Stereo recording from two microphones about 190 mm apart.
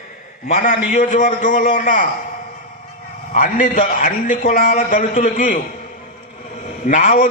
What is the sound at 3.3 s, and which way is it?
A man's voice, 40° left (ahead or behind).